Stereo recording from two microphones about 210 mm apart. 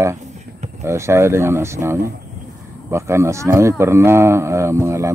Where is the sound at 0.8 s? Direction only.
15° right (ahead or behind).